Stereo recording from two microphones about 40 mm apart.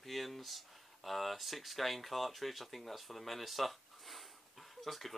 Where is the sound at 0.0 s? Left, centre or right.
Centre.